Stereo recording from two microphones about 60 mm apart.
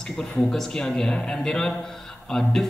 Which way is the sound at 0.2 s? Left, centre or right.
Centre.